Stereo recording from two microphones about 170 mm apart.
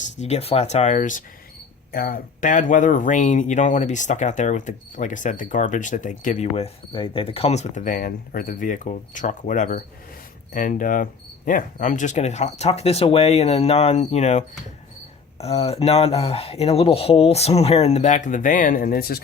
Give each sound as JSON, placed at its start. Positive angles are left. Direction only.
{"t": 0.2, "sound": "speech", "side_deg": 40}
{"t": 1.9, "sound": "speech", "side_deg": 60}
{"t": 6.9, "sound": "speech", "side_deg": 30}